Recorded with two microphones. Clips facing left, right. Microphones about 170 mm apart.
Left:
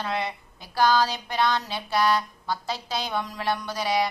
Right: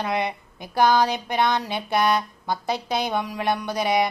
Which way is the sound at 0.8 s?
20° right (ahead or behind).